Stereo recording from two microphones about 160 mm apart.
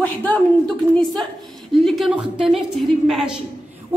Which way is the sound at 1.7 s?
Centre (ahead or behind).